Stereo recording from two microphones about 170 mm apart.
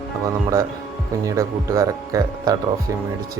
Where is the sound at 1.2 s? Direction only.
15° right (ahead or behind).